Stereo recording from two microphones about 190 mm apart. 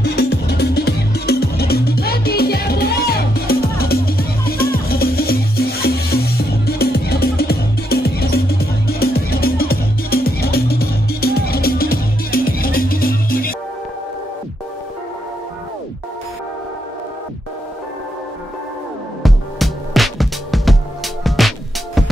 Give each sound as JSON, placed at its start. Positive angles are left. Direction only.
{"t": 0.0, "sound": "music", "side_deg": 55}
{"t": 19.2, "sound": "music", "side_deg": 0}